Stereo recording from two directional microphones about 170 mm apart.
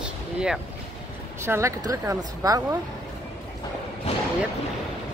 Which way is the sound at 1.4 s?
15° right (ahead or behind).